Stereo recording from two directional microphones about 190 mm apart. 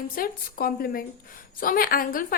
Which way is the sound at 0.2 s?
50° left (ahead or behind).